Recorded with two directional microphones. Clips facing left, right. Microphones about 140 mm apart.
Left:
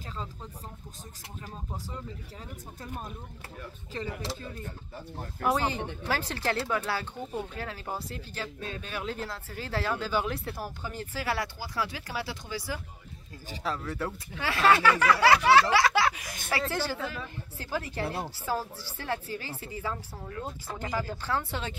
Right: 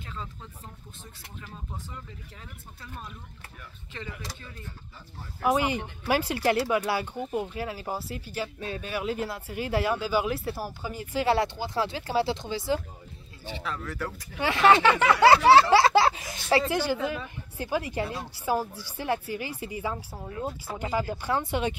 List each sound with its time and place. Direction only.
3.9 s speech: 35° left (ahead or behind)
5.4 s speech: 10° right (ahead or behind)
11.1 s speech: 25° right (ahead or behind)
13.5 s speech: 40° left (ahead or behind)
13.8 s speech: 25° left (ahead or behind)
14.3 s speech: 20° right (ahead or behind)
16.6 s speech: 15° right (ahead or behind)